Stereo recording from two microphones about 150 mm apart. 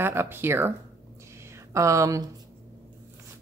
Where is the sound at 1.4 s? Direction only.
20° right (ahead or behind).